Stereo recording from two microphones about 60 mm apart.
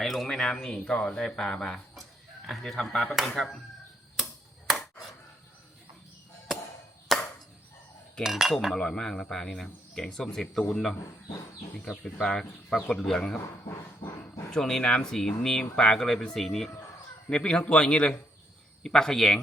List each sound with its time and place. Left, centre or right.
0.0 s speech: centre
4.2 s finger snapping: centre
7.1 s chop: centre
8.2 s speech: centre
8.7 s speech: centre
12.2 s speech: centre
13.7 s a sound: left
14.5 s speech: centre